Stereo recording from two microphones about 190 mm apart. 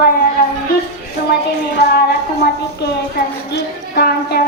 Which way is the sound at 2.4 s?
60° left (ahead or behind).